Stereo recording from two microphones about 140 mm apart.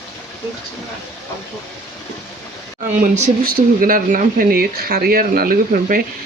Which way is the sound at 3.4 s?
90° right.